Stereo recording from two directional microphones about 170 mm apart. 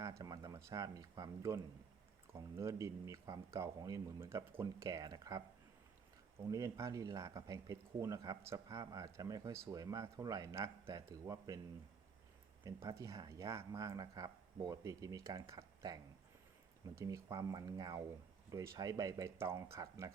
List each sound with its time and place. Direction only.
0.0 s speech: 20° right (ahead or behind)
6.5 s speech: 15° right (ahead or behind)
12.6 s speech: 20° right (ahead or behind)